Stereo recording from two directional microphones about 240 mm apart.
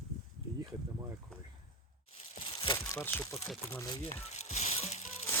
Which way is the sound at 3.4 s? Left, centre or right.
Centre.